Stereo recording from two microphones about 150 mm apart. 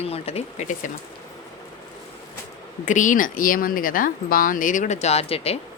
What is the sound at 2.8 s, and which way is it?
Speech, 60° left (ahead or behind).